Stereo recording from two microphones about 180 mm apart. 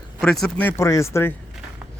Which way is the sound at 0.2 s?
5° left (ahead or behind).